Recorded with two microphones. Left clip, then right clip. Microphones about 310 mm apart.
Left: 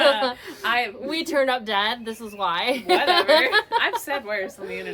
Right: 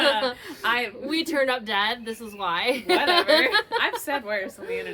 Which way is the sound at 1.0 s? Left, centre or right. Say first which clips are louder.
Left 2 dB; centre.